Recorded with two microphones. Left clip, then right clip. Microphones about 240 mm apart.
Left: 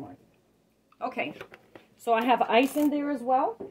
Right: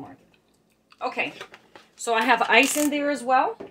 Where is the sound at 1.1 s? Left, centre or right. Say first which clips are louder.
Right 5 dB; left.